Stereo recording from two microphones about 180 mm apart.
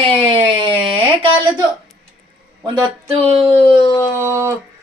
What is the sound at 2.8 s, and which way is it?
Speech, 30° right (ahead or behind).